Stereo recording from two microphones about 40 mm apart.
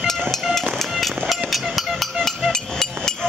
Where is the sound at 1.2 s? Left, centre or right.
Centre.